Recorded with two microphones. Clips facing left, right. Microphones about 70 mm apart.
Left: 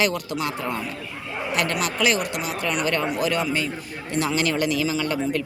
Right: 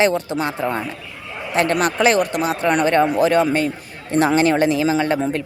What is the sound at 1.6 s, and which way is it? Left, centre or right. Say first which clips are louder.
Speech: right 7 dB; right.